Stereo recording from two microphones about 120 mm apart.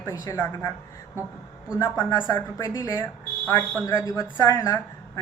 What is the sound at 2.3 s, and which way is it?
A woman's voice, 30° left (ahead or behind).